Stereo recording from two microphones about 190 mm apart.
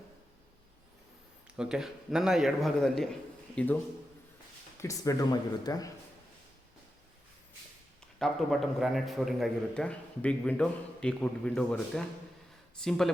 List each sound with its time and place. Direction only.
1.5 s a man's voice: 5° right (ahead or behind)
4.8 s speech: 15° left (ahead or behind)
8.2 s a man's voice: centre (ahead or behind)